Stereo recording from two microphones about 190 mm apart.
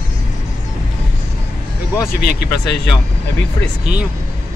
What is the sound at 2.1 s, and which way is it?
Speech, 50° left (ahead or behind).